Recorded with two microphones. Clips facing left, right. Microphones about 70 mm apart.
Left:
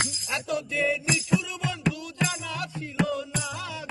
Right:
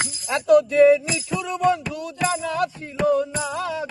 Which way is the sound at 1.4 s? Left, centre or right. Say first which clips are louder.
Right 12 dB; right.